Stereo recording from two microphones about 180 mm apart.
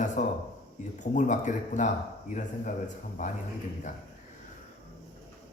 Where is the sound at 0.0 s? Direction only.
45° left (ahead or behind).